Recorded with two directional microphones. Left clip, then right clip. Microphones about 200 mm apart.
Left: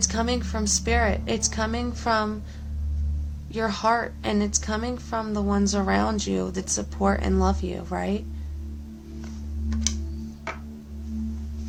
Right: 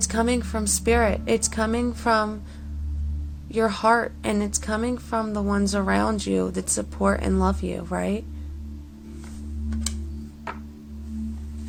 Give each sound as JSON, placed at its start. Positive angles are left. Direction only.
{"t": 0.0, "sound": "a woman's voice", "side_deg": -30}
{"t": 3.5, "sound": "a woman's voice", "side_deg": -30}